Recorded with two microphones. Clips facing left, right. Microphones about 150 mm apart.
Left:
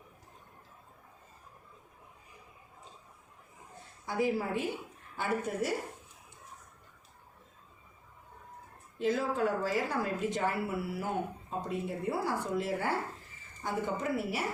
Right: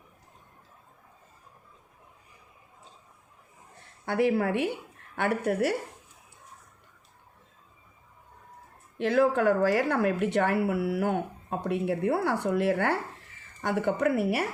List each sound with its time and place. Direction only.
4.0 s a woman's voice: 70° right (ahead or behind)
9.0 s a woman's voice: 70° right (ahead or behind)